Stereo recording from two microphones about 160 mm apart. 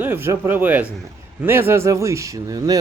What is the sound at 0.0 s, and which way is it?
Speech, 15° right (ahead or behind).